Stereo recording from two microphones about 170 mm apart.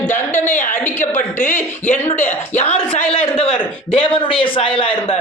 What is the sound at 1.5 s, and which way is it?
A man's voice, 45° left (ahead or behind).